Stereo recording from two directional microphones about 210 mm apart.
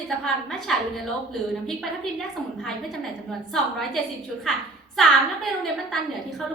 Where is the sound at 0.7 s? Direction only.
Centre (ahead or behind).